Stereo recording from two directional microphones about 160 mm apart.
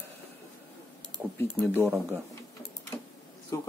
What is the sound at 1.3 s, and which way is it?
Speech, 10° left (ahead or behind).